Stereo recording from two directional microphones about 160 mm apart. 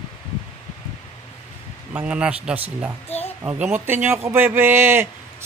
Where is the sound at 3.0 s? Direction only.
40° left (ahead or behind).